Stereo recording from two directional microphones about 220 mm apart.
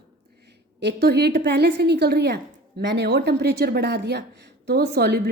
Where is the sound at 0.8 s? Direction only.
50° right (ahead or behind).